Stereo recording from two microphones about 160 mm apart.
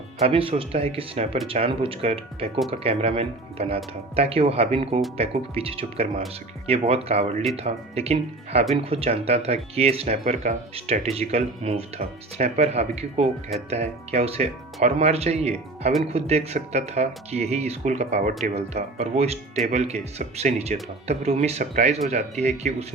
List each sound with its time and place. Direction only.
0.2 s speech: 35° right (ahead or behind)